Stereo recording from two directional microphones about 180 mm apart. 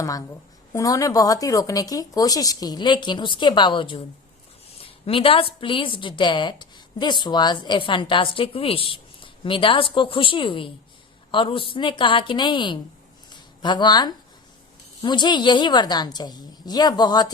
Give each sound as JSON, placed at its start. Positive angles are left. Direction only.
{"t": 0.0, "sound": "a woman's voice", "side_deg": 20}
{"t": 13.3, "sound": "a sound", "side_deg": 25}
{"t": 15.0, "sound": "a woman's voice", "side_deg": 25}